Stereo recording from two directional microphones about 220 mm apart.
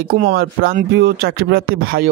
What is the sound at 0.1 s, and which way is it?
Speech, 45° right (ahead or behind).